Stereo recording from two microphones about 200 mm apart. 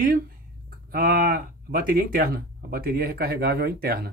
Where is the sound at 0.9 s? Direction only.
45° right (ahead or behind).